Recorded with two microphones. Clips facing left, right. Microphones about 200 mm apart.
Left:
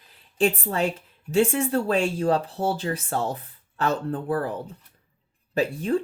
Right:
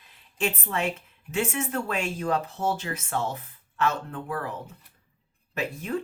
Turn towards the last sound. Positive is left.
turn(degrees=30)  # may be behind; listen again after turning